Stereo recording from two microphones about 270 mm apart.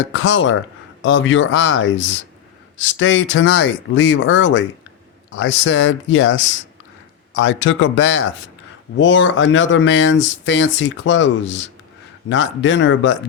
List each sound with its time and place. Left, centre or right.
0.1 s speech: left